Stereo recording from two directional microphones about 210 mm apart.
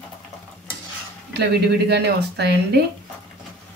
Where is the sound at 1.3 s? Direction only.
50° right (ahead or behind).